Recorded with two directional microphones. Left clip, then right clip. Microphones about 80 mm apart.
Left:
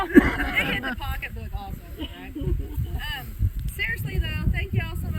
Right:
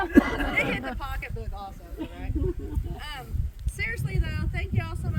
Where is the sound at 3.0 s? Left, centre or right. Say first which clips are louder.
Left 6 dB; right.